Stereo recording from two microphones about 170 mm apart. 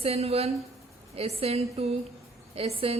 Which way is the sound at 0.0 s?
35° right (ahead or behind).